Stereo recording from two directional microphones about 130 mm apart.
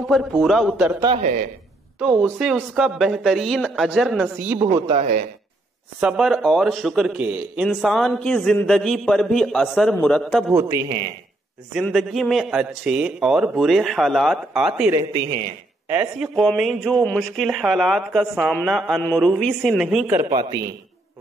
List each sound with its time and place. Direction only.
0.4 s a man's voice: centre (ahead or behind)
1.2 s speech: 75° right (ahead or behind)
2.0 s a man's voice: 5° right (ahead or behind)
4.4 s speech: 15° right (ahead or behind)
4.8 s speech: 50° right (ahead or behind)
5.9 s a man's voice: 5° right (ahead or behind)
7.6 s a man's voice: centre (ahead or behind)
10.5 s a man's voice: 20° right (ahead or behind)
11.9 s a man's voice: centre (ahead or behind)
14.9 s a man's voice: 30° right (ahead or behind)
16.2 s a man's voice: 5° right (ahead or behind)
20.2 s a man's voice: 30° right (ahead or behind)